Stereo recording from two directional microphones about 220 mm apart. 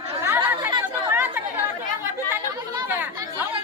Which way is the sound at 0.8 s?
10° right (ahead or behind).